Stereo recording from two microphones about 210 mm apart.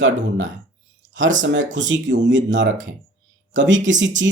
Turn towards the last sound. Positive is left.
turn(degrees=-60)  # may be behind; listen again after turning